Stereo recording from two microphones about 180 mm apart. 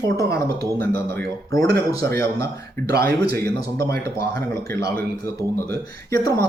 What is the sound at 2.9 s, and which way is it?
Speech, 60° right (ahead or behind).